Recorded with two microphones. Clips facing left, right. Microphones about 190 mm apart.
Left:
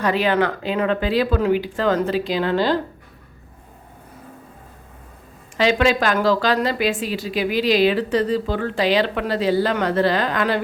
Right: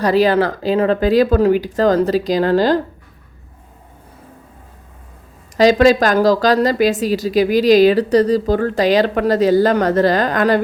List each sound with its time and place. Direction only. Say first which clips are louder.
0.0 s a woman's voice: right 5 dB; 35° right (ahead or behind)
5.5 s a woman's voice: right 7 dB; 40° right (ahead or behind)